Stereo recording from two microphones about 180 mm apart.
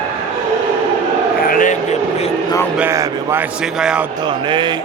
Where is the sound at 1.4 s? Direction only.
50° left (ahead or behind).